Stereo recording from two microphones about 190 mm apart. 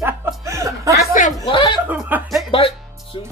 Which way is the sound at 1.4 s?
25° left (ahead or behind).